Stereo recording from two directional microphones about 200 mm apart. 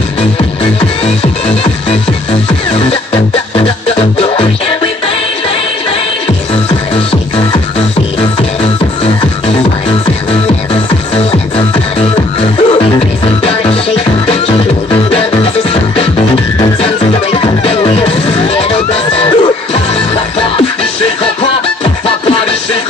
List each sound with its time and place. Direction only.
3.5 s music: 30° left (ahead or behind)
10.7 s music: 30° left (ahead or behind)
16.8 s music: 30° left (ahead or behind)